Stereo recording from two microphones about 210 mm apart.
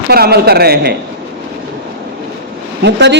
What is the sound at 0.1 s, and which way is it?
Speech, 50° right (ahead or behind).